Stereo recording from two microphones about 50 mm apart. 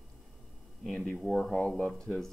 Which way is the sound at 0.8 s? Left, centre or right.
Centre.